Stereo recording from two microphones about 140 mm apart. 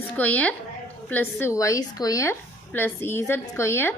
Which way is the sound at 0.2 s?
10° left (ahead or behind).